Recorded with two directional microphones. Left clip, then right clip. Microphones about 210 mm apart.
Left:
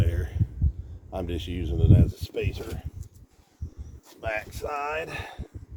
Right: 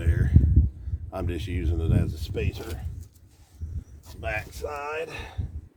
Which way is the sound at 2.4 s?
50° right (ahead or behind).